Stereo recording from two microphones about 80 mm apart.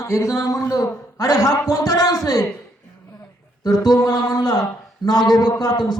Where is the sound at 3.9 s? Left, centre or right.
Left.